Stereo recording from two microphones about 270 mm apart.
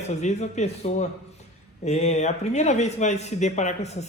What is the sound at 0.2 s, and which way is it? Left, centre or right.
A man's voice, left.